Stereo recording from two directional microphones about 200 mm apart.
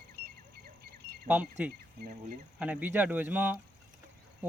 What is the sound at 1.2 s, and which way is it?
Speech, 5° right (ahead or behind).